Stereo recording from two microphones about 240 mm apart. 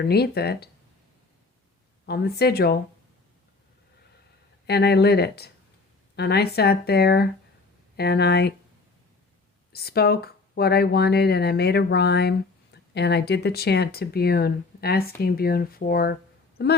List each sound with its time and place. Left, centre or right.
0.0 s speech: left
2.0 s speech: left
4.6 s speech: left
9.7 s speech: left